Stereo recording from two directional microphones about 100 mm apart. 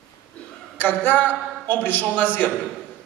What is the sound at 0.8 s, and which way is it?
A man's voice, 15° left (ahead or behind).